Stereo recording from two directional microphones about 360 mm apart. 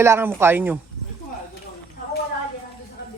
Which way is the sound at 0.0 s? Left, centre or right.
Centre.